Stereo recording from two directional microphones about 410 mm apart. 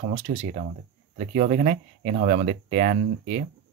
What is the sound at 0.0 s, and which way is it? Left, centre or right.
Speech, centre.